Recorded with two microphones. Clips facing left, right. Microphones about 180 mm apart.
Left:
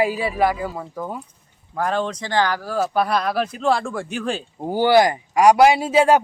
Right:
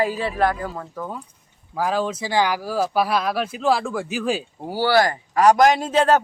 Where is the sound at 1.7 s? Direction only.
5° right (ahead or behind).